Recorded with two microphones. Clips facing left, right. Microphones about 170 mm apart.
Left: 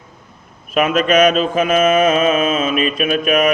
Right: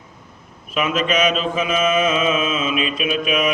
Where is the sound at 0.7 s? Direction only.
50° left (ahead or behind).